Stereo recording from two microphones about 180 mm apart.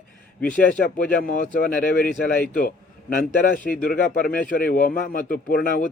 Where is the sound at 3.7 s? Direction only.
50° left (ahead or behind).